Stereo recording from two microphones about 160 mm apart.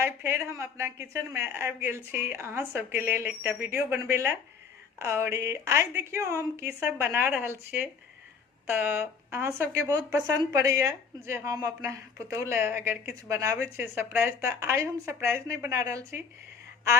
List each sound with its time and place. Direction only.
0.0 s speech: 15° right (ahead or behind)